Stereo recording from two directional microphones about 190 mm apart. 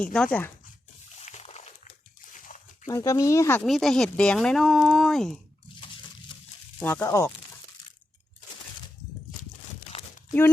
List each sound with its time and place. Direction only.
0.0 s speech: 5° left (ahead or behind)
1.2 s a sound: 35° left (ahead or behind)
2.3 s dog: 40° left (ahead or behind)
2.8 s speech: 15° left (ahead or behind)
3.6 s speech: centre (ahead or behind)
6.7 s speech: 10° left (ahead or behind)